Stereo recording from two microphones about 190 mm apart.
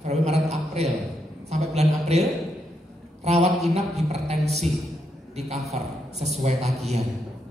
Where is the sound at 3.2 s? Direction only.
35° right (ahead or behind).